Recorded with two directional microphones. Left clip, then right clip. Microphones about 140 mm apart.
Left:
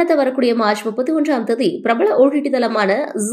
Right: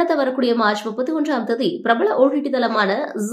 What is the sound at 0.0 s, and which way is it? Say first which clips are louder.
Speech: left 3 dB; 15° left (ahead or behind).